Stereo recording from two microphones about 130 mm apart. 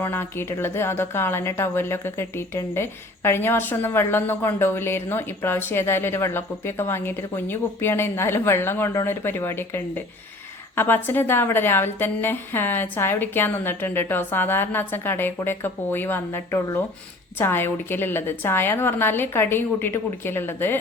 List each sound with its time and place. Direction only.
0.0 s a woman's voice: 20° left (ahead or behind)